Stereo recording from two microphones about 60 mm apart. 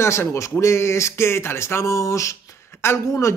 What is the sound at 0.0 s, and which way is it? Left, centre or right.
A man's voice, left.